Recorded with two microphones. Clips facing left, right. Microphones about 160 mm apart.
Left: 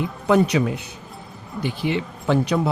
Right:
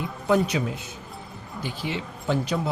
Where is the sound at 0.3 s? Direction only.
70° left (ahead or behind).